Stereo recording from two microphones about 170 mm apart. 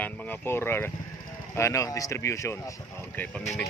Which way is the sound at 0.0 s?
10° left (ahead or behind).